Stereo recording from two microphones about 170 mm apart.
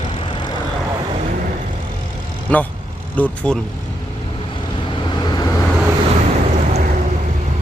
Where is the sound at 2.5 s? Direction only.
10° left (ahead or behind).